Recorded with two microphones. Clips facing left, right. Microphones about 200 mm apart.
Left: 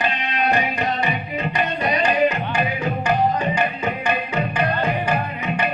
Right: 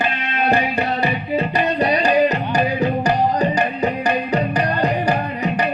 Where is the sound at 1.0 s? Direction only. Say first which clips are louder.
Right 4 dB; 35° right (ahead or behind).